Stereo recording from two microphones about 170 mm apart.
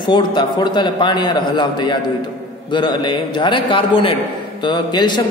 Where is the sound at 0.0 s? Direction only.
25° left (ahead or behind).